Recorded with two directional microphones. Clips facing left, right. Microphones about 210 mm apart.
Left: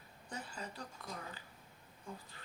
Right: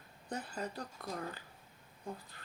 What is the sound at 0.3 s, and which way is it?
Speech, 55° right (ahead or behind).